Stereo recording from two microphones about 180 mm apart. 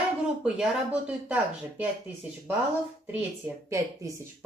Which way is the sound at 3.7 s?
20° right (ahead or behind).